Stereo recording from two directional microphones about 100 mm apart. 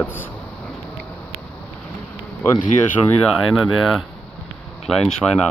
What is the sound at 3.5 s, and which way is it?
Speech, centre (ahead or behind).